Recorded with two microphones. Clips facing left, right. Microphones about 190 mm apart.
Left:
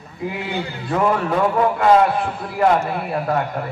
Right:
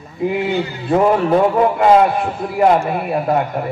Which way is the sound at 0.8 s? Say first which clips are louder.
Right 5 dB; 25° right (ahead or behind).